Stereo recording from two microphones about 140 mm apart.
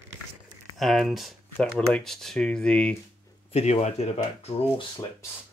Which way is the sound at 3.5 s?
50° left (ahead or behind).